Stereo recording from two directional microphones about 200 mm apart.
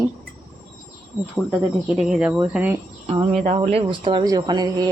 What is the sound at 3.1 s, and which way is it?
Speech, 30° right (ahead or behind).